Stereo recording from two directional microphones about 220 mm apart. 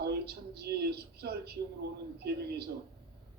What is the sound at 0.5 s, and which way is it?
A man's voice, 45° right (ahead or behind).